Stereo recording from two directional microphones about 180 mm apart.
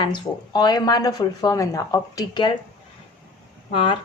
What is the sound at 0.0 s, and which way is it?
Speech, 25° left (ahead or behind).